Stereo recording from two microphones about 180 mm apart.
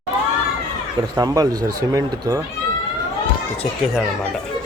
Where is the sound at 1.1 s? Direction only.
20° right (ahead or behind).